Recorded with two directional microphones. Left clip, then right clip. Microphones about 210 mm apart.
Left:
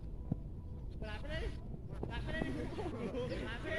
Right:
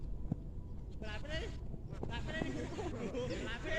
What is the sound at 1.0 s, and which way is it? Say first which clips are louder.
Vehicle: right 1 dB; 20° right (ahead or behind).